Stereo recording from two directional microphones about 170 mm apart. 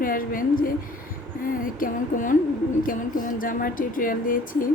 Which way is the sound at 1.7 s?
50° left (ahead or behind).